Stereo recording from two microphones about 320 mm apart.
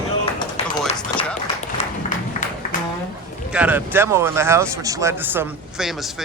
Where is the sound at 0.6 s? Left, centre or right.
Centre.